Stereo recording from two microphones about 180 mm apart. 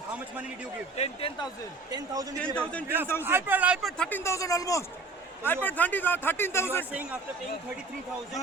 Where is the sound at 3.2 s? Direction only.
10° right (ahead or behind); by 6.9 s 15° left (ahead or behind).